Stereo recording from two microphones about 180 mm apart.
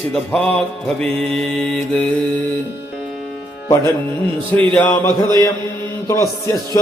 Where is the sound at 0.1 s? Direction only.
5° left (ahead or behind).